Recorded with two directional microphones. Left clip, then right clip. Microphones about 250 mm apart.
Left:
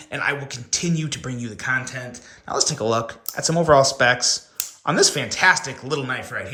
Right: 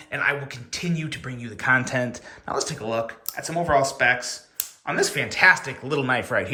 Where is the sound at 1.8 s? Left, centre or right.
Centre.